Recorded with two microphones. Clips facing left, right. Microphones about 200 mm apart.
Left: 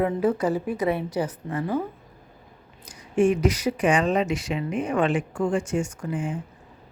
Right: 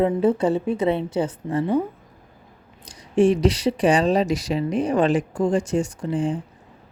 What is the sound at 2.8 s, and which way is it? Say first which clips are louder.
Speech: right 3 dB; 35° right (ahead or behind).